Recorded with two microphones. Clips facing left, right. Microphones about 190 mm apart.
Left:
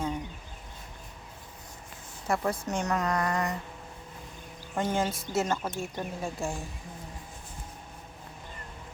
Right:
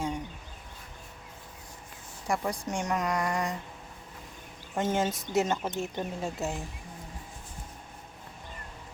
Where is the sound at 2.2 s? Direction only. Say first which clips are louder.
Left 1 dB; 10° right (ahead or behind).